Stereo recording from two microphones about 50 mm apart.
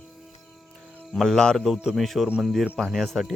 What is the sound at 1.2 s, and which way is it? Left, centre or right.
Speech, centre.